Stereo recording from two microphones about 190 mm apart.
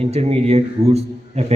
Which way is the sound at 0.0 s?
35° right (ahead or behind).